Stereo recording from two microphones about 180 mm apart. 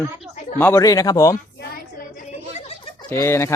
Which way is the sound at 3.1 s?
15° left (ahead or behind).